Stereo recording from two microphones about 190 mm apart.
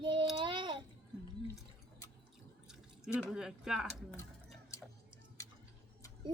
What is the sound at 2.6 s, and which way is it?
Drip, 5° right (ahead or behind).